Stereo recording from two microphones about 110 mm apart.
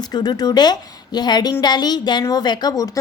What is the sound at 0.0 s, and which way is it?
A woman's voice, 40° left (ahead or behind).